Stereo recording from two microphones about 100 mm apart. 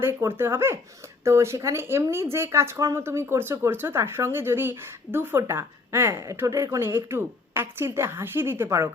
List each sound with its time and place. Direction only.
0.0 s speech: 25° right (ahead or behind)